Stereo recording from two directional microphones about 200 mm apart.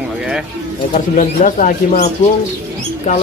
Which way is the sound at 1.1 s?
40° left (ahead or behind).